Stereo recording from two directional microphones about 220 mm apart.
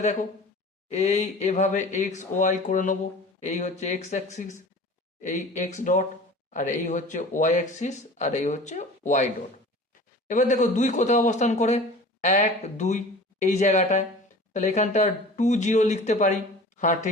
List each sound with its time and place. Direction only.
0.0 s speech: 30° left (ahead or behind)